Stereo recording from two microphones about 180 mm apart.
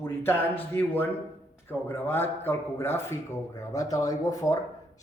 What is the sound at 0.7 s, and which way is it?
A man's voice, 10° left (ahead or behind).